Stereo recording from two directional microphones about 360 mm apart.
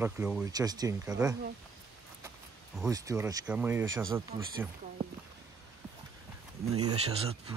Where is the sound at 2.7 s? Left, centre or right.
Centre.